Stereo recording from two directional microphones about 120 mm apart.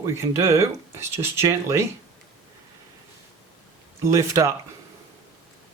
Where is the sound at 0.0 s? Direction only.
25° right (ahead or behind).